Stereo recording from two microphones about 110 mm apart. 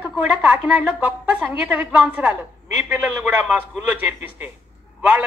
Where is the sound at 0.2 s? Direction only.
15° right (ahead or behind).